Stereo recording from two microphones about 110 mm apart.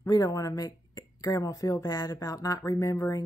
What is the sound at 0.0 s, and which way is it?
A woman's voice, 35° left (ahead or behind).